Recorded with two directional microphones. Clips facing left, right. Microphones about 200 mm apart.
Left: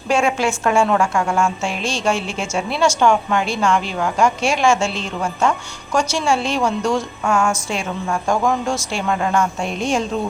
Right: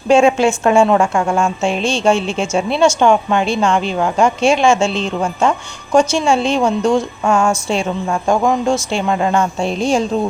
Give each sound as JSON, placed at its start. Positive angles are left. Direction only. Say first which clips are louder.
{"t": 0.1, "sound": "a woman's voice", "louder": "right 7 dB", "side_deg": -25}